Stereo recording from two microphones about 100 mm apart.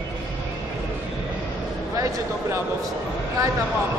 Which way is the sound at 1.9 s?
35° right (ahead or behind).